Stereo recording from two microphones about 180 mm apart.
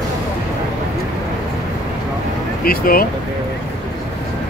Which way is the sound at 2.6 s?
55° left (ahead or behind).